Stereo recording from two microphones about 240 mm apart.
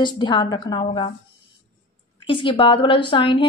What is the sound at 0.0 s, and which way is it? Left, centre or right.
A woman's voice, centre.